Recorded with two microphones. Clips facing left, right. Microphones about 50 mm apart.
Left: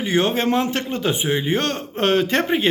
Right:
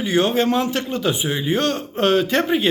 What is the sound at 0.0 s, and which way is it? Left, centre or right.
A man's voice, left.